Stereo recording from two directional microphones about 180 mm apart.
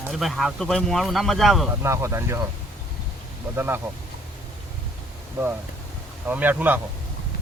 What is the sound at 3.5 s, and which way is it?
Speech, 10° right (ahead or behind).